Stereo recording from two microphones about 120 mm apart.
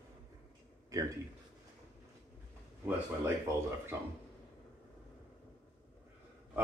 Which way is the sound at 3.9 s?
20° right (ahead or behind).